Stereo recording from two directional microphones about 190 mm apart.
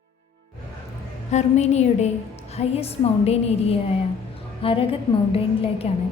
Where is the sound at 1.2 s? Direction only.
35° left (ahead or behind).